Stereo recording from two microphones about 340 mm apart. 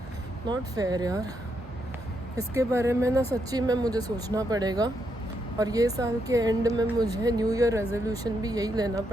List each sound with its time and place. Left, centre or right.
0.4 s speech: centre
2.6 s speech: centre